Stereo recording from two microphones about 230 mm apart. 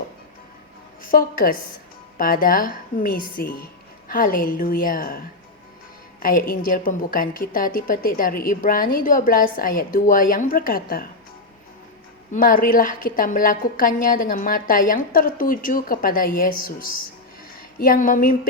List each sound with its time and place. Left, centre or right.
1.0 s a woman's voice: left
6.2 s a woman's voice: left
12.3 s a woman's voice: left